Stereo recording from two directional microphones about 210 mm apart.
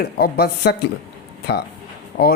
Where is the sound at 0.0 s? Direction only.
50° left (ahead or behind).